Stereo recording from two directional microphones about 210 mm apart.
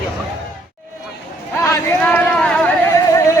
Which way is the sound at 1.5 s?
10° left (ahead or behind).